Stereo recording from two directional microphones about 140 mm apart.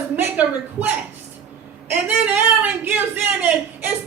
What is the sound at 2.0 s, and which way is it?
A man's voice, 10° right (ahead or behind).